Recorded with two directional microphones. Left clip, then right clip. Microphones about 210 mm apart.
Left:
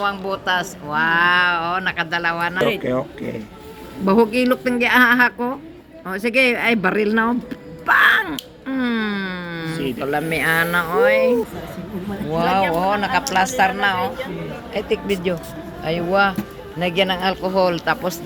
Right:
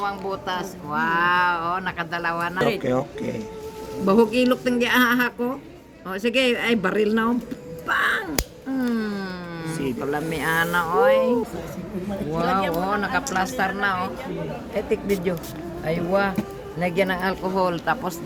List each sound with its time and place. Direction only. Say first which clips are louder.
0.0 s speech: left 5 dB; 30° left (ahead or behind); by 2.6 s 10° left (ahead or behind)
2.8 s speech: left 1 dB; 20° right (ahead or behind)
4.0 s speech: left 2 dB; 10° left (ahead or behind)
9.0 s a sound: left 5 dB; 10° left (ahead or behind)
9.8 s speech: left 4 dB; 15° left (ahead or behind)
12.3 s speech: left 5 dB; 20° left (ahead or behind)